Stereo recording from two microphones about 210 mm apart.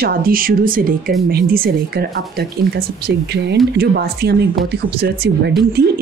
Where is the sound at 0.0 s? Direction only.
45° right (ahead or behind).